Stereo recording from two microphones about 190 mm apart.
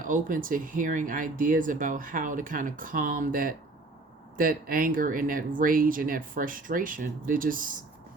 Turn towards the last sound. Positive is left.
turn(degrees=-45)  # may be behind; listen again after turning